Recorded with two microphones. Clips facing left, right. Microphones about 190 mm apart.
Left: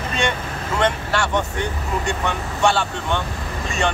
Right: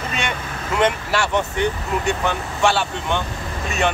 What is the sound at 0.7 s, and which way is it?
A man's voice, 5° right (ahead or behind).